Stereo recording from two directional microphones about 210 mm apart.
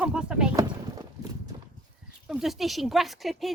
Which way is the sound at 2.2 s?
Centre (ahead or behind).